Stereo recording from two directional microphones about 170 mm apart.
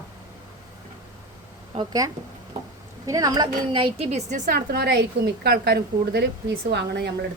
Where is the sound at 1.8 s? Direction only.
20° right (ahead or behind); by 4.6 s 45° right (ahead or behind).